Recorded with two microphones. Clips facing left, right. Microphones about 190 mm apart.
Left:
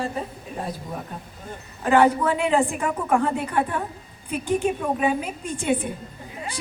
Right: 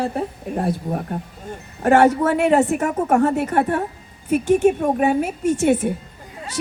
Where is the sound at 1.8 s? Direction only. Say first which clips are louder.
Right 4 dB; 45° right (ahead or behind).